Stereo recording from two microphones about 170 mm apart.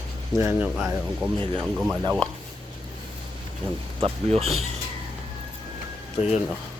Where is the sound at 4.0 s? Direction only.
35° right (ahead or behind).